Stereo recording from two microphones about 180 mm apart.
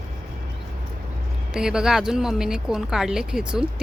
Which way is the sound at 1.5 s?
5° right (ahead or behind).